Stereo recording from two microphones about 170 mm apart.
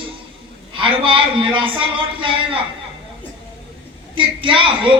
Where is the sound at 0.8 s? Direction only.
30° right (ahead or behind).